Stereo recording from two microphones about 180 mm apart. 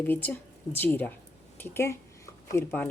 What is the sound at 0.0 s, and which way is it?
Speech, 10° left (ahead or behind).